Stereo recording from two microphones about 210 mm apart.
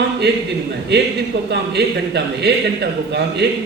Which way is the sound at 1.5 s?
50° right (ahead or behind).